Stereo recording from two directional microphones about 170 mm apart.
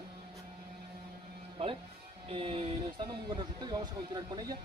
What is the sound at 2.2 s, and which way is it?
Speech, 30° right (ahead or behind).